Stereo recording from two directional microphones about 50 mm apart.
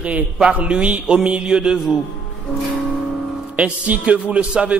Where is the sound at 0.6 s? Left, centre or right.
Right.